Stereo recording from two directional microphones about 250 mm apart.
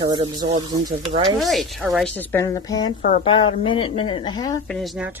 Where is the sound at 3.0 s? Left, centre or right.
Left.